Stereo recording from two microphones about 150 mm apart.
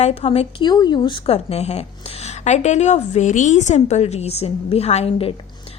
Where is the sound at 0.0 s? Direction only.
45° left (ahead or behind).